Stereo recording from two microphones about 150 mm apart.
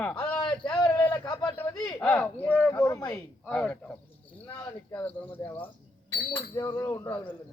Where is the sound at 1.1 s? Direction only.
25° left (ahead or behind).